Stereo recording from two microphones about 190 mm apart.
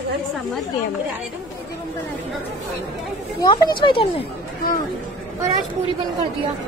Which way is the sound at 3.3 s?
25° left (ahead or behind).